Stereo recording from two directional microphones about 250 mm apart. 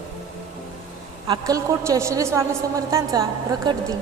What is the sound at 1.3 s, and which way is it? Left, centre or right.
A woman's voice, centre.